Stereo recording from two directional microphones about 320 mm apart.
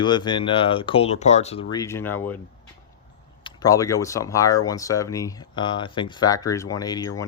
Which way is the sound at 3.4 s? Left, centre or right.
Centre.